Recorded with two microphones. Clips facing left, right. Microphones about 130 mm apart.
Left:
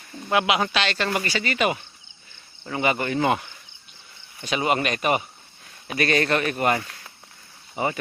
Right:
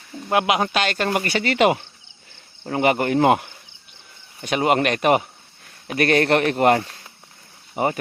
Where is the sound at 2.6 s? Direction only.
60° right (ahead or behind).